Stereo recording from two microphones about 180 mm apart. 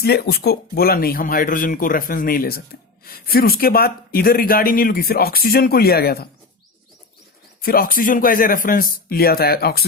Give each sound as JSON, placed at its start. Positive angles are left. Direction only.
{"t": 0.0, "sound": "speech", "side_deg": 60}
{"t": 7.6, "sound": "speech", "side_deg": 55}